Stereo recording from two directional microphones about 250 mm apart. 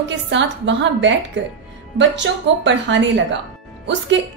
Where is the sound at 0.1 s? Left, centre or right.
Right.